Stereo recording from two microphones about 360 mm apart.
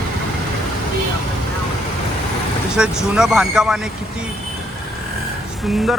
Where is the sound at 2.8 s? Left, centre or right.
Centre.